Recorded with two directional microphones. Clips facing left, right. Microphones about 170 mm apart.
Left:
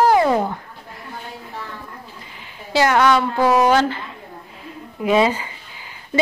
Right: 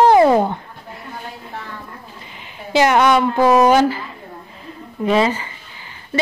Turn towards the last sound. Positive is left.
turn(degrees=15)  # may be behind; listen again after turning